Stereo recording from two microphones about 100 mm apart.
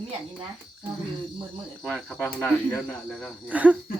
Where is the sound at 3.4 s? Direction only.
15° right (ahead or behind).